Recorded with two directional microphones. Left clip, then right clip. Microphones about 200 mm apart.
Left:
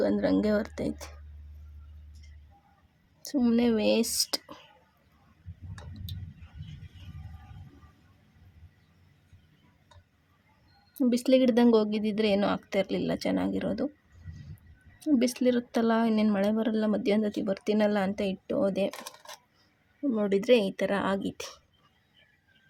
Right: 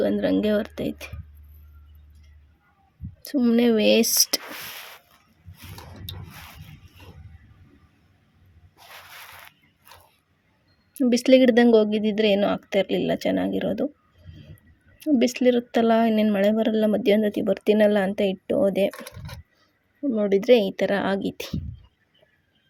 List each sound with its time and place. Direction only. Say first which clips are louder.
0.0 s speech: right 4 dB; 5° right (ahead or behind)
3.2 s speech: right 6 dB; 10° right (ahead or behind)
10.9 s speech: right 7 dB; 10° right (ahead or behind)
15.1 s speech: right 6 dB; 10° right (ahead or behind)
18.9 s coin: right 5 dB; 30° left (ahead or behind)
20.1 s speech: right 6 dB; 5° right (ahead or behind)